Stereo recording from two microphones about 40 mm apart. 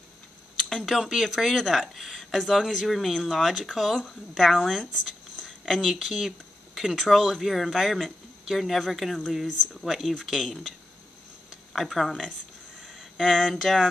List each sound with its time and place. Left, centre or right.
0.6 s a sound: centre
0.8 s speech: centre
5.3 s a sound: centre
5.8 s speech: centre
9.5 s speech: centre
9.8 s speech: centre
11.7 s speech: centre
12.8 s a sound: centre
13.4 s speech: centre